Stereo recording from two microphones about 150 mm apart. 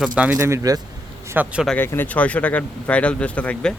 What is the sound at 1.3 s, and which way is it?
Speech, 10° right (ahead or behind).